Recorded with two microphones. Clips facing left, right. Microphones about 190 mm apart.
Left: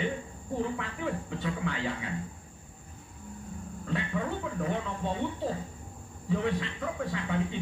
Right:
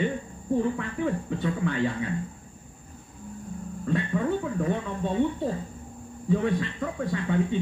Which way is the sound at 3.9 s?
45° right (ahead or behind).